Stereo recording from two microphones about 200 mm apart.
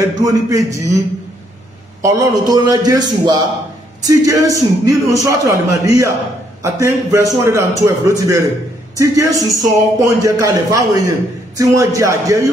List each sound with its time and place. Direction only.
0.2 s speech: 15° right (ahead or behind)
2.0 s a man's voice: 20° right (ahead or behind)